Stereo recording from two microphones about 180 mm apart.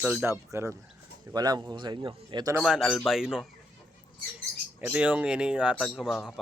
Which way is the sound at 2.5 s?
5° right (ahead or behind).